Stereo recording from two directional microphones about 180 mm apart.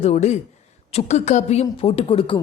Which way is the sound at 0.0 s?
40° left (ahead or behind).